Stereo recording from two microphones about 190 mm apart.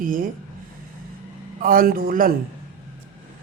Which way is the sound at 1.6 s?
50° right (ahead or behind).